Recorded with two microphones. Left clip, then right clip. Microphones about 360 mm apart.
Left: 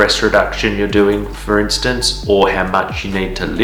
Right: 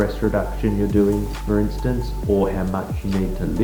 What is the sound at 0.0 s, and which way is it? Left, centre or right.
Speech, centre.